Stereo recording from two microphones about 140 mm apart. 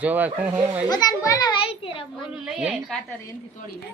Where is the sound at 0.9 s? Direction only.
30° left (ahead or behind).